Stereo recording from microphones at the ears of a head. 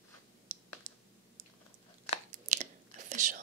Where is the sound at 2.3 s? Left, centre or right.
Right.